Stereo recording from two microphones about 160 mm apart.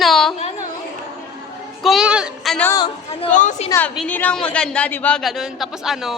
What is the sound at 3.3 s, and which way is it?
Speech, 50° left (ahead or behind).